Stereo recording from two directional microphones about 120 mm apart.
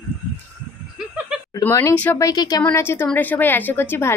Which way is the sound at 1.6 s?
25° left (ahead or behind).